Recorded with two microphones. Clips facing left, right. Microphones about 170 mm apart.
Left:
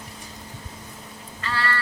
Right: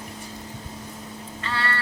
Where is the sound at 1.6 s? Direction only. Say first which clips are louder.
Left 2 dB; 25° right (ahead or behind).